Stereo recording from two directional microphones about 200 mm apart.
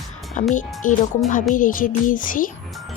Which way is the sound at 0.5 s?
40° left (ahead or behind).